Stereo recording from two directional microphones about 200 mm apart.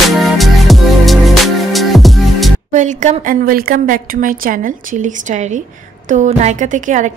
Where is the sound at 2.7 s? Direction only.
40° right (ahead or behind).